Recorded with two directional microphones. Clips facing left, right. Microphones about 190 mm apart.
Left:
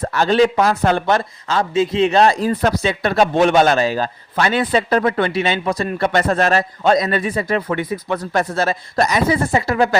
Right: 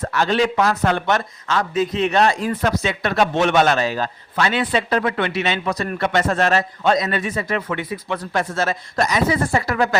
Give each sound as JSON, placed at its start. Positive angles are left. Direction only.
{"t": 0.0, "sound": "speech", "side_deg": 35}
{"t": 9.5, "sound": "speech", "side_deg": 25}